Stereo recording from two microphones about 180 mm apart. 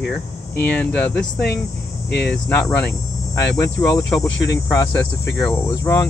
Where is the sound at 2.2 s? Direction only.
10° left (ahead or behind).